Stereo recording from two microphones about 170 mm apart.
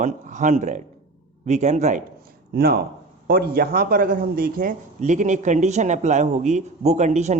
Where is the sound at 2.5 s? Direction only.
65° right (ahead or behind).